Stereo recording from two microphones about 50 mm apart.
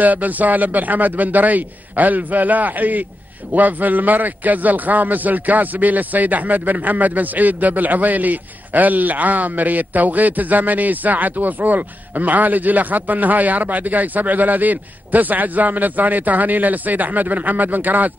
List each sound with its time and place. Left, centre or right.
0.0 s a man's voice: right